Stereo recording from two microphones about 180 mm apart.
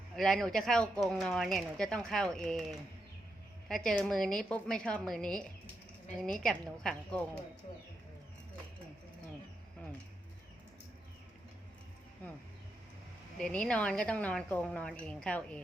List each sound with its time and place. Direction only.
0.2 s speech: centre (ahead or behind)
13.4 s speech: 5° left (ahead or behind)